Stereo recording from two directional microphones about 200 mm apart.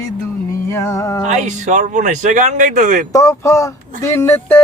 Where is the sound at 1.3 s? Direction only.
35° right (ahead or behind).